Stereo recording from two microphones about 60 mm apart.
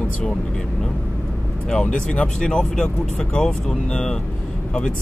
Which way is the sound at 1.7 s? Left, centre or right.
Centre.